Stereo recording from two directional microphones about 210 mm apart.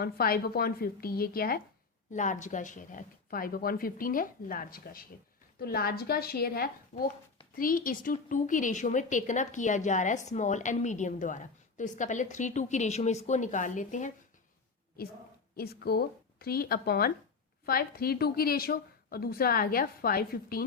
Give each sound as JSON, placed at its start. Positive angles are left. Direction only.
{"t": 0.0, "sound": "a woman's voice", "side_deg": 45}